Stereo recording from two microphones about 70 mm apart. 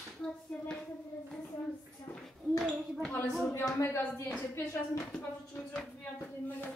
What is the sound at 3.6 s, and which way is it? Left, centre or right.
Speech, left.